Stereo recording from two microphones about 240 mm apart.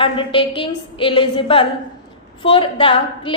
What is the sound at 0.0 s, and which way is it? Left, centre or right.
A woman's voice, left.